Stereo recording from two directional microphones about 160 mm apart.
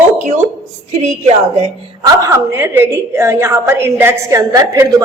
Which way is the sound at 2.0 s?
20° right (ahead or behind).